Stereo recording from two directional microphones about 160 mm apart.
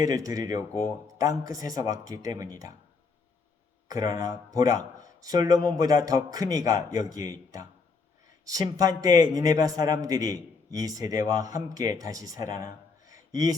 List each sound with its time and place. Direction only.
0.0 s a man's voice: 20° right (ahead or behind)
3.8 s a man's voice: 20° right (ahead or behind)
8.7 s a man's voice: 20° right (ahead or behind)
12.6 s a sound: 20° right (ahead or behind)